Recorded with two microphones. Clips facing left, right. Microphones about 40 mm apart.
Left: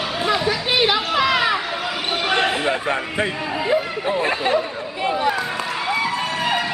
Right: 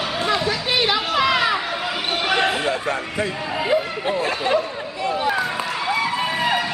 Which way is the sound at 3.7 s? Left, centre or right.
Centre.